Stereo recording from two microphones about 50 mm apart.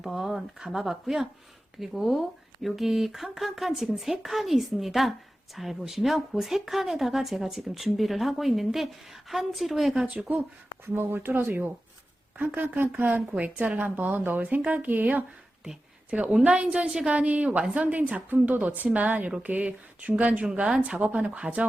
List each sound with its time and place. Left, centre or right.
0.0 s speech: centre
10.8 s speech: right
13.3 s a woman's voice: right